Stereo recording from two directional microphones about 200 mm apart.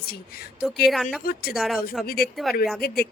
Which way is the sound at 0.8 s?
Centre (ahead or behind).